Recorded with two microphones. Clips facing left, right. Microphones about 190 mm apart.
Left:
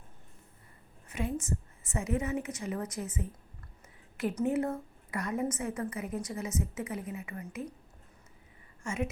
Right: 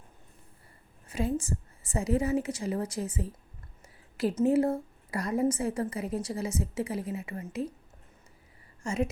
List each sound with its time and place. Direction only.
1.0 s a woman's voice: 30° right (ahead or behind)
8.8 s a woman's voice: 35° right (ahead or behind)